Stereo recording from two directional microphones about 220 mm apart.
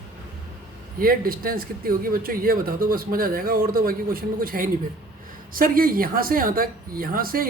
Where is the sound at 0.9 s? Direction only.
40° right (ahead or behind).